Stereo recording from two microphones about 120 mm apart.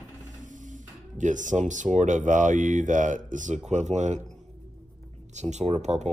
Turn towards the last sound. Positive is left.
turn(degrees=-70)  # may be behind; listen again after turning